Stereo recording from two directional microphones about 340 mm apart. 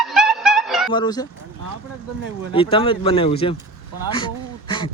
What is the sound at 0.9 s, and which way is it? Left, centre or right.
Speech, centre.